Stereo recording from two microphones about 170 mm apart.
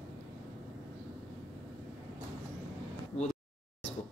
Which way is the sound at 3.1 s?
40° left (ahead or behind).